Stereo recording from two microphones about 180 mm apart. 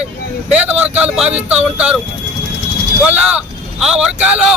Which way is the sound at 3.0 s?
5° right (ahead or behind).